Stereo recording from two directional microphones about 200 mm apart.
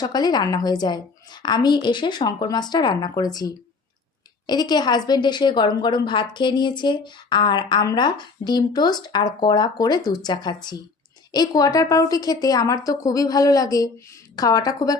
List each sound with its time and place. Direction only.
0.0 s a woman's voice: 20° left (ahead or behind)